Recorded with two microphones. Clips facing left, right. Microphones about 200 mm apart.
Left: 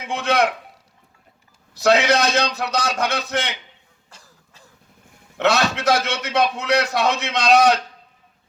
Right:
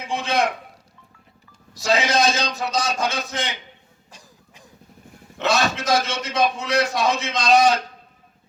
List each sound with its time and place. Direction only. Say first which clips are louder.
0.1 s a sound: left 2 dB; 65° left (ahead or behind)
1.7 s a man's voice: left 4 dB; 65° left (ahead or behind)
4.1 s cough: right 2 dB; 15° right (ahead or behind)
5.4 s a man's voice: left 2 dB; 65° left (ahead or behind)